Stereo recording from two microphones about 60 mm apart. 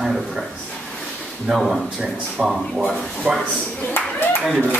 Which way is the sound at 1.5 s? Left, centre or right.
Centre.